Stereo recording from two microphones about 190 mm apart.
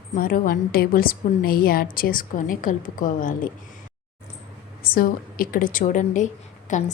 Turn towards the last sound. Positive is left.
turn(degrees=40)  # may be behind; listen again after turning